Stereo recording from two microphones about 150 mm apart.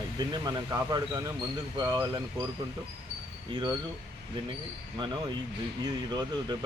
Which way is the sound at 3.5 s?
30° right (ahead or behind).